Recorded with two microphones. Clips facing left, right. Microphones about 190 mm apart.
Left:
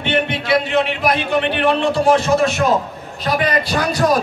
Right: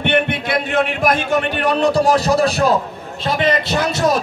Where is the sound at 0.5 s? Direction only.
50° right (ahead or behind).